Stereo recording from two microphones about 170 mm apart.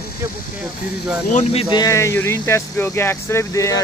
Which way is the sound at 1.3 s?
40° left (ahead or behind).